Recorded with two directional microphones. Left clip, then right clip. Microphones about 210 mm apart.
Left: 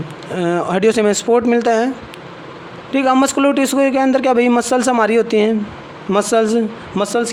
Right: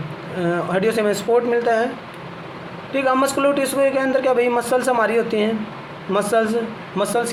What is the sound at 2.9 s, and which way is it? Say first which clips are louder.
A man's voice: left 4 dB; 50° left (ahead or behind).